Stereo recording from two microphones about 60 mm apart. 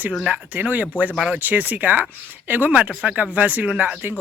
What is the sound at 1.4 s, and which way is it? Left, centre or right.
Speech, right.